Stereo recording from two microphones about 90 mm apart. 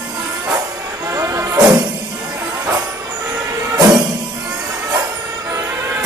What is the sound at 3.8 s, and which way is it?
Music, 45° right (ahead or behind).